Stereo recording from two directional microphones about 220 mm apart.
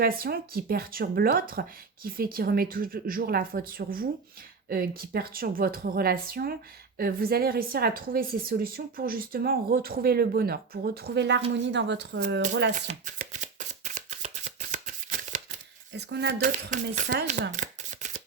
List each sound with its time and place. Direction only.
0.0 s a woman's voice: 45° right (ahead or behind)
12.7 s shuffling cards: 35° right (ahead or behind)
15.9 s speech: 50° right (ahead or behind)
17.6 s a sound: 35° right (ahead or behind)